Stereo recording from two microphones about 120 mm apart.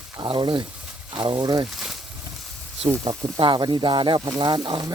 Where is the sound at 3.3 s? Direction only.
40° right (ahead or behind).